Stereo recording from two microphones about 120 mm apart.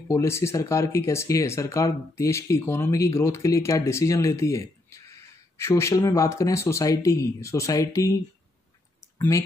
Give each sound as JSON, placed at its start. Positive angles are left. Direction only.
{"t": 0.1, "sound": "speech", "side_deg": 25}